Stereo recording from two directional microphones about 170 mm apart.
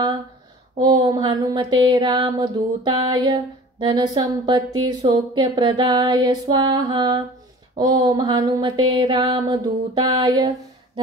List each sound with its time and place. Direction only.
0.7 s speech: 25° right (ahead or behind)